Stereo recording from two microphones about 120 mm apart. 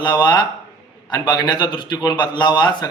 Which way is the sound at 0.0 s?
35° left (ahead or behind).